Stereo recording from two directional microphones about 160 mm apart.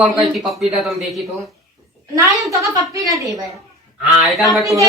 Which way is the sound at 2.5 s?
20° right (ahead or behind).